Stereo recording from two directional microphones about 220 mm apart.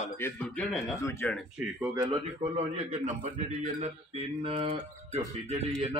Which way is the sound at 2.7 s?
30° right (ahead or behind).